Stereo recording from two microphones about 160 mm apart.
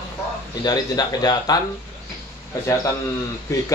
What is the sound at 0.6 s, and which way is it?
Speech, 25° left (ahead or behind).